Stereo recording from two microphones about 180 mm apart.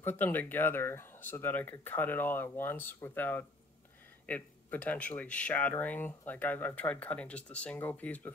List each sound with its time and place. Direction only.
0.0 s speech: 10° left (ahead or behind)